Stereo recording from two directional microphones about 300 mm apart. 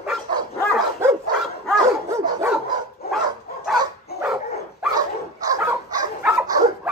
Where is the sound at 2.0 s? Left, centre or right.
Centre.